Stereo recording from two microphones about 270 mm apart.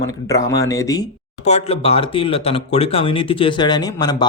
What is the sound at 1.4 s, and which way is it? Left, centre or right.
Speech, left.